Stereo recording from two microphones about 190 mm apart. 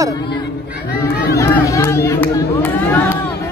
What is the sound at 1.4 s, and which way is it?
Speech, 15° left (ahead or behind).